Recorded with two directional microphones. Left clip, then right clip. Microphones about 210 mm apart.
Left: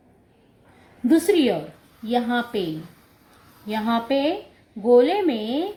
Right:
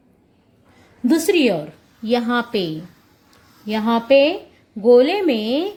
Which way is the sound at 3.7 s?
45° right (ahead or behind).